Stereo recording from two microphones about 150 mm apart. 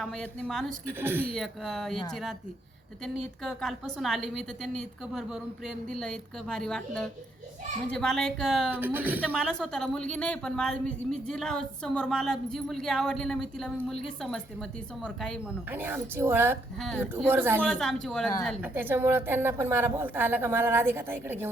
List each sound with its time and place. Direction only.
0.0 s a woman's voice: 5° left (ahead or behind)
0.9 s a woman's voice: 15° right (ahead or behind)
1.3 s a woman's voice: centre (ahead or behind)
3.0 s a woman's voice: centre (ahead or behind)
8.7 s a woman's voice: 10° right (ahead or behind)
9.3 s a woman's voice: centre (ahead or behind)
15.7 s a woman's voice: 15° right (ahead or behind)
17.6 s a woman's voice: 5° left (ahead or behind)
18.6 s a woman's voice: 15° right (ahead or behind)